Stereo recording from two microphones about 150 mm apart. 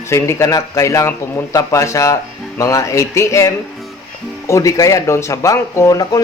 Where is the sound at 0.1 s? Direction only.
20° left (ahead or behind).